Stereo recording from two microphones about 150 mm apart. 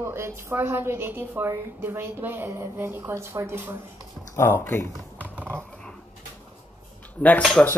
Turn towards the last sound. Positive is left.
turn(degrees=5)  # may be behind; listen again after turning